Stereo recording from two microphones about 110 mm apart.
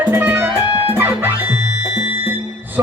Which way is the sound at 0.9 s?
20° right (ahead or behind).